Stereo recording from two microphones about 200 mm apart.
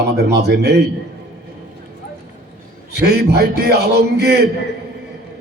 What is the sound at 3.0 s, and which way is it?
A man's voice, 55° right (ahead or behind).